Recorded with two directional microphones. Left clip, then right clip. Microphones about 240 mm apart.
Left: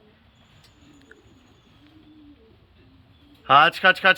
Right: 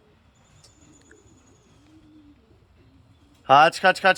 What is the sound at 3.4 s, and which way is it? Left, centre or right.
Speech, centre.